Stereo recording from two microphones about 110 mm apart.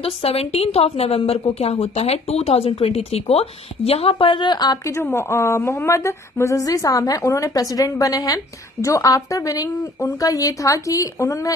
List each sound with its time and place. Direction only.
0.0 s a woman's voice: 65° left (ahead or behind); by 4.9 s 40° left (ahead or behind)
5.0 s a woman's voice: 25° left (ahead or behind)